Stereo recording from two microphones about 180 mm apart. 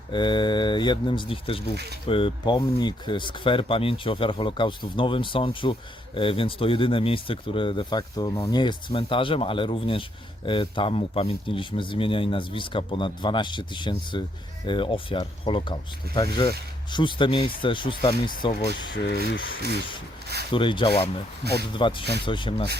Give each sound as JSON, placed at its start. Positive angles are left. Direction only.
{"t": 0.1, "sound": "speech", "side_deg": 25}
{"t": 1.7, "sound": "speech", "side_deg": -65}
{"t": 2.0, "sound": "speech", "side_deg": 30}
{"t": 18.6, "sound": "speech", "side_deg": 70}
{"t": 20.5, "sound": "speech", "side_deg": 30}